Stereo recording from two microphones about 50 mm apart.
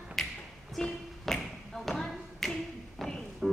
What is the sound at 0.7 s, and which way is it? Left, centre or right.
Tap, centre.